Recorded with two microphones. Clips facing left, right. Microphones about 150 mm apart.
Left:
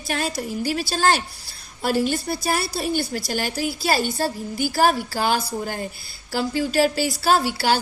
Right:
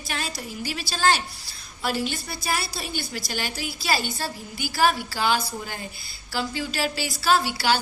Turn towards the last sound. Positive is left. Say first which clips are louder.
# left 2 dB
turn(degrees=45)  # may be behind; listen again after turning